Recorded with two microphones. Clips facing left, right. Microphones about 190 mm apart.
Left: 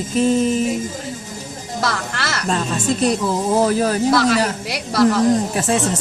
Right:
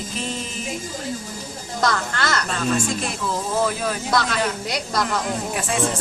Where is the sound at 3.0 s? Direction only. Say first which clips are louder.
Left 8 dB; 40° left (ahead or behind).